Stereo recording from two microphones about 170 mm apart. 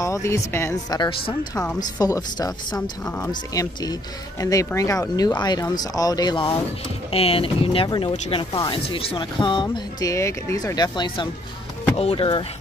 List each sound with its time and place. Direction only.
0.0 s speech: 15° left (ahead or behind)
12.0 s speech: 35° left (ahead or behind)